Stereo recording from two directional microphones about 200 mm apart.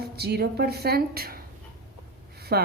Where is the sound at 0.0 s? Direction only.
50° right (ahead or behind).